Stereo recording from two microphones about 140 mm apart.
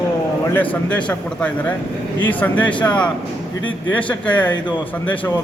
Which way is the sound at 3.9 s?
10° left (ahead or behind).